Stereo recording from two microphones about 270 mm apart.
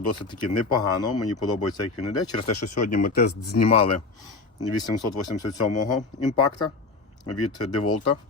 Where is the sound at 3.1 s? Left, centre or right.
Left.